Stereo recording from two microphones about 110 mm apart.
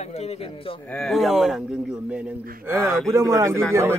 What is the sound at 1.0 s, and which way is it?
Speech, centre (ahead or behind).